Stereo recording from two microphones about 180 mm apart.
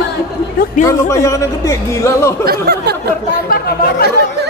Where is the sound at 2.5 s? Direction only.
60° right (ahead or behind).